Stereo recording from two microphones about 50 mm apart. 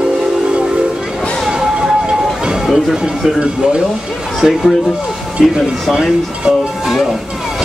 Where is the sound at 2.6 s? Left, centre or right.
Centre.